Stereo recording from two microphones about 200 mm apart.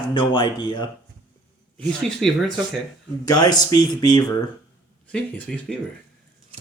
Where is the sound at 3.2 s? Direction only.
20° left (ahead or behind).